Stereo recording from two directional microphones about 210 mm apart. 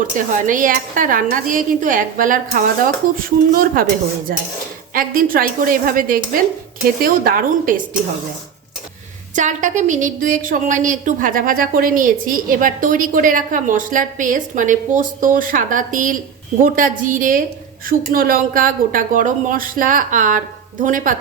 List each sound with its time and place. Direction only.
0.3 s a woman's voice: 40° right (ahead or behind)
9.3 s a woman's voice: 35° right (ahead or behind)